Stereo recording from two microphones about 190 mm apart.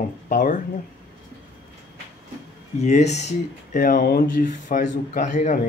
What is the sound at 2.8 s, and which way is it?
Speech, 35° left (ahead or behind).